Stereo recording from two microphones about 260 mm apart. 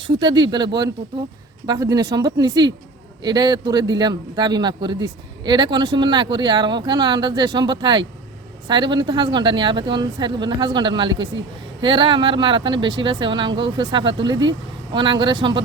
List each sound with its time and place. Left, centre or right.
0.1 s a man's voice: centre